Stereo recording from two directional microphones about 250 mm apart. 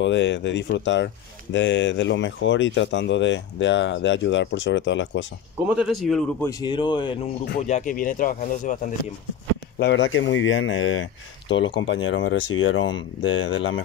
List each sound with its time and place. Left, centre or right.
0.0 s speech: left
6.0 s speech: centre
6.6 s speech: centre
7.6 s speech: left
9.8 s speech: left